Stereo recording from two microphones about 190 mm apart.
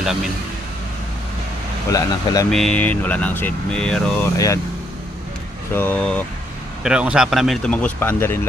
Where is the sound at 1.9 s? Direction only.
20° left (ahead or behind).